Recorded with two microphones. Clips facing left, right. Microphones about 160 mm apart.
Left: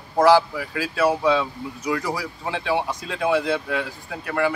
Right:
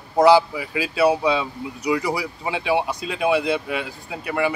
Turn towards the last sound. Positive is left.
turn(degrees=-15)  # may be behind; listen again after turning